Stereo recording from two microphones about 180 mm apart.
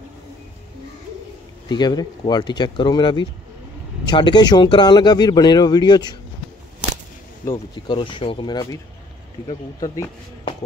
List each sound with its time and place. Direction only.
1.7 s a man's voice: 25° left (ahead or behind)
7.4 s a man's voice: 20° left (ahead or behind)